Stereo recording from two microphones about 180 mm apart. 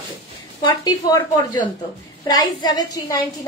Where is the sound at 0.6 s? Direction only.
20° left (ahead or behind).